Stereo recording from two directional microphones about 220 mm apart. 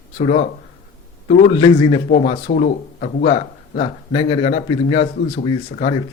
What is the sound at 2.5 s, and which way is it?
Speech, 40° left (ahead or behind).